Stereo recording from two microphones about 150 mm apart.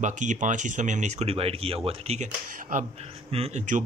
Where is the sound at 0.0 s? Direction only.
55° right (ahead or behind).